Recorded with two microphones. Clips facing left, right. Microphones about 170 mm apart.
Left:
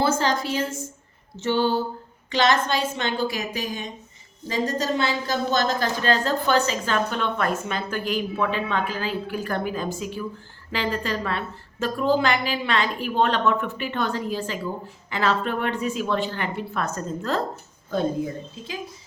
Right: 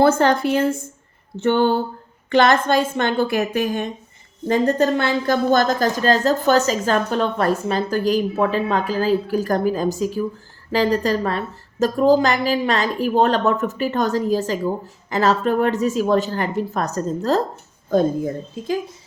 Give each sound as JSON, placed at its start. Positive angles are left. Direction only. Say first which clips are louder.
{"t": 0.0, "sound": "a woman's voice", "louder": "right 7 dB", "side_deg": -60}